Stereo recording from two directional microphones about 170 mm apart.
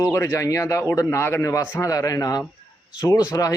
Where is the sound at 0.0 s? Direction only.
15° left (ahead or behind).